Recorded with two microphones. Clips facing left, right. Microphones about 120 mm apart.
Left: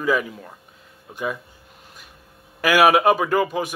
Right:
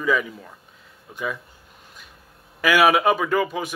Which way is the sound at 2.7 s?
10° left (ahead or behind).